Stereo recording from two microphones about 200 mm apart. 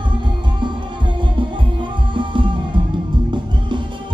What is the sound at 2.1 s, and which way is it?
Music, 25° right (ahead or behind).